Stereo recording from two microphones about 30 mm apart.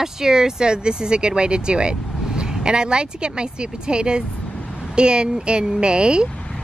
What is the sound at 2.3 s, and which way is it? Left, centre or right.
Speech, right.